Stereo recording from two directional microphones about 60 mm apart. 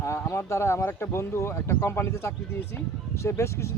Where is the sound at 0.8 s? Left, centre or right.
Left.